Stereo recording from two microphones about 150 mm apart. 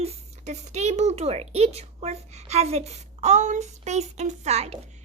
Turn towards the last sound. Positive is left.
turn(degrees=-45)  # may be behind; listen again after turning